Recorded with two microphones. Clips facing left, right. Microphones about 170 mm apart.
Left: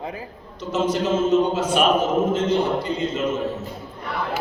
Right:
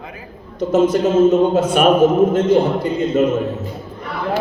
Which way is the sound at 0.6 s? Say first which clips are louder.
Right 8 dB; 50° right (ahead or behind).